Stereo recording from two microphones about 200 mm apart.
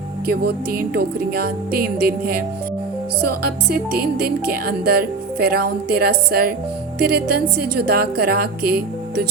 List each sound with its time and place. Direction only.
0.3 s music: 50° right (ahead or behind)